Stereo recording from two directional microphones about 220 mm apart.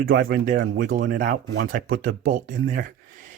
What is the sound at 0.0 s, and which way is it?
Speech, 50° right (ahead or behind).